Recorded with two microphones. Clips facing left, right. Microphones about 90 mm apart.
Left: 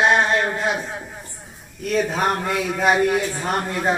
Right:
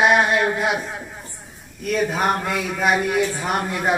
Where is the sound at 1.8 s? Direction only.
5° right (ahead or behind).